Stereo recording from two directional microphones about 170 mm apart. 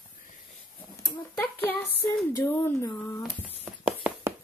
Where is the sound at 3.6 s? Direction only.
5° right (ahead or behind).